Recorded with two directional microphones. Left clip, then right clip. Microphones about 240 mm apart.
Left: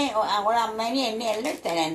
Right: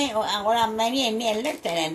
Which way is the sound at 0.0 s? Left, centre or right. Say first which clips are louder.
Left 1 dB; right.